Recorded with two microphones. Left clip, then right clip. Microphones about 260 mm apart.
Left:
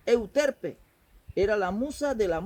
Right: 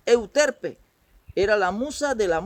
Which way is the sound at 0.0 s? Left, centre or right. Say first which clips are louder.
Right 5 dB; right.